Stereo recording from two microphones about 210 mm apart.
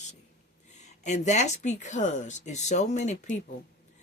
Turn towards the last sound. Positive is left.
turn(degrees=35)  # may be behind; listen again after turning